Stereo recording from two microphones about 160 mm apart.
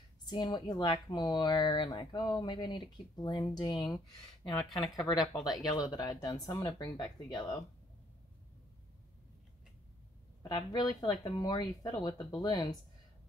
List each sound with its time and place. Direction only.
0.2 s speech: 25° left (ahead or behind)
4.6 s speech: centre (ahead or behind)
5.9 s speech: 25° left (ahead or behind)
10.5 s speech: 25° left (ahead or behind)